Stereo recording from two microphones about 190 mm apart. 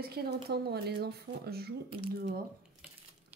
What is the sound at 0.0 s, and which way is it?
Speech, 55° right (ahead or behind).